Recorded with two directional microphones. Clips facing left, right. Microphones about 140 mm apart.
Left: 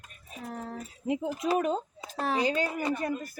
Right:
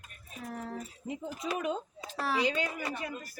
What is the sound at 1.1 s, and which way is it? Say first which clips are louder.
Speech: left 8 dB; 65° left (ahead or behind).